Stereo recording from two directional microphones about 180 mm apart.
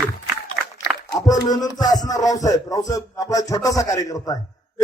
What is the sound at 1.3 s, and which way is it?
Music, 20° left (ahead or behind).